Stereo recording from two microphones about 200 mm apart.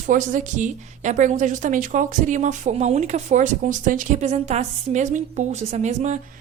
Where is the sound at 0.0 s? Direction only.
40° right (ahead or behind).